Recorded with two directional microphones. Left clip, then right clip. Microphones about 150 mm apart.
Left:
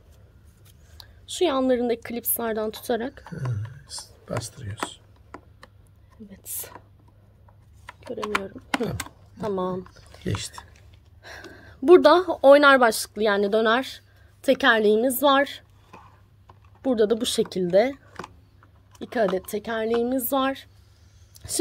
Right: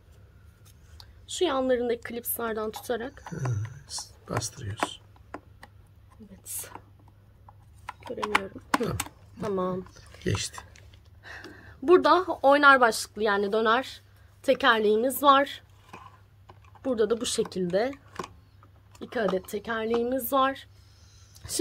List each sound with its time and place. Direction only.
0.9 s a woman's voice: 35° left (ahead or behind)
3.5 s speech: 15° right (ahead or behind)
6.3 s speech: 30° left (ahead or behind)
9.4 s speech: 10° left (ahead or behind)
11.2 s a woman's voice: 45° left (ahead or behind)
16.8 s a woman's voice: 30° left (ahead or behind)
17.9 s a sound: 35° right (ahead or behind)
18.9 s a woman's voice: 40° left (ahead or behind)